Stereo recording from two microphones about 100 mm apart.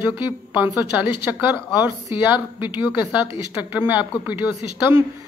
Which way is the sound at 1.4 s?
15° right (ahead or behind).